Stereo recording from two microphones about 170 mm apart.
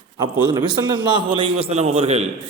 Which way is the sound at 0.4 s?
30° right (ahead or behind).